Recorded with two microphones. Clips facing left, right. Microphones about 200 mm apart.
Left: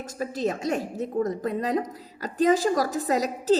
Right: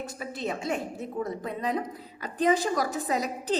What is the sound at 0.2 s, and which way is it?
A woman's voice, 40° left (ahead or behind).